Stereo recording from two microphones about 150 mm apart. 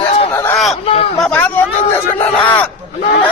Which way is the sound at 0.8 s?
40° left (ahead or behind).